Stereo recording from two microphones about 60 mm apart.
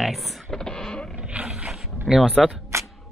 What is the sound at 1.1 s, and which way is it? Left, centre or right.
Roar, centre.